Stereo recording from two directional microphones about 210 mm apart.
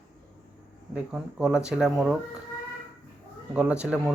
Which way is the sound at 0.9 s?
Centre (ahead or behind).